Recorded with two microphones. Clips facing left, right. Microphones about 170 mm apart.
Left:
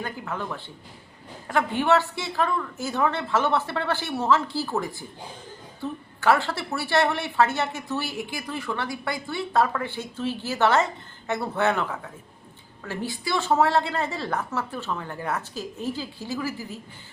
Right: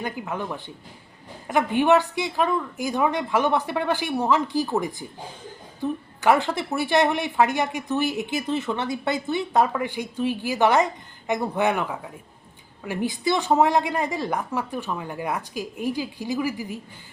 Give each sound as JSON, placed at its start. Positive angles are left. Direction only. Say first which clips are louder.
{"t": 0.0, "sound": "a woman's voice", "louder": "right 2 dB", "side_deg": -15}